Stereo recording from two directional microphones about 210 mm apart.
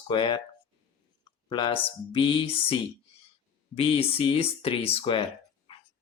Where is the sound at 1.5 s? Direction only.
25° left (ahead or behind).